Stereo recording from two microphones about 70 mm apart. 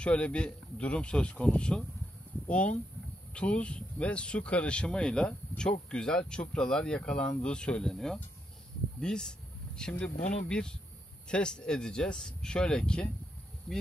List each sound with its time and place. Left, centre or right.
0.0 s speech: centre
3.3 s speech: centre